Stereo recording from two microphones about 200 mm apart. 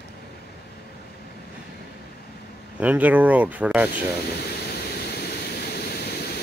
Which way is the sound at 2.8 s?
5° right (ahead or behind).